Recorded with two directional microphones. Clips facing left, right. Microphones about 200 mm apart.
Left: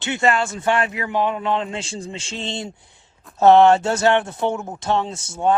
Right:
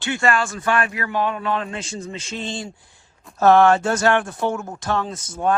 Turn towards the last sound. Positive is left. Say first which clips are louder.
# left 2 dB
turn(degrees=25)  # may be behind; listen again after turning